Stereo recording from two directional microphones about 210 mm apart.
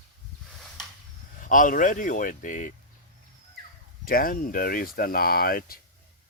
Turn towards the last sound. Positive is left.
turn(degrees=45)  # may be behind; listen again after turning